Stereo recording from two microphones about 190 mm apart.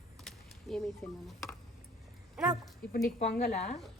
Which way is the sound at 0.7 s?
Centre (ahead or behind).